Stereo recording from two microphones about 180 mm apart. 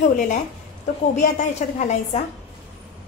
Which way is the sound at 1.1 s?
40° left (ahead or behind).